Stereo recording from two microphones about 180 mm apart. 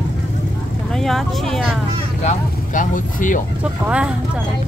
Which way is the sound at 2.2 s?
45° left (ahead or behind).